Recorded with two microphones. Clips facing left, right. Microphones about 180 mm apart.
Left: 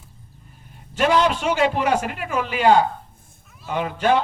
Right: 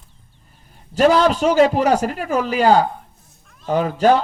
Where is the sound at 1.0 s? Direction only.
40° right (ahead or behind).